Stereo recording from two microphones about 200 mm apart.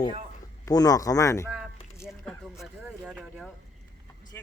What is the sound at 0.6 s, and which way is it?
Speech, 20° left (ahead or behind).